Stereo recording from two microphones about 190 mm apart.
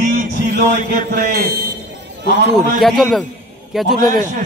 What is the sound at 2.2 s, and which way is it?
Speech, 55° right (ahead or behind).